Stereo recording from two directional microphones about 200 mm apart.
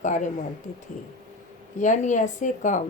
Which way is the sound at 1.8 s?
40° left (ahead or behind).